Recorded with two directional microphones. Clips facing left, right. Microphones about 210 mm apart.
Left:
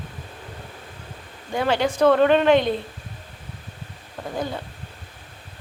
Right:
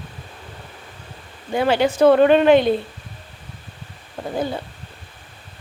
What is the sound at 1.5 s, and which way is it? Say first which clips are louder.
Speech: right 4 dB; 5° right (ahead or behind).